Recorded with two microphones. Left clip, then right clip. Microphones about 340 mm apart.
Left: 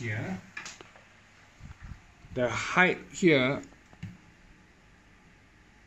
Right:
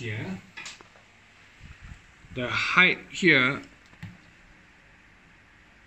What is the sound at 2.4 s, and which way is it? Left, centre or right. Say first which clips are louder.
Speech: right 4 dB; left.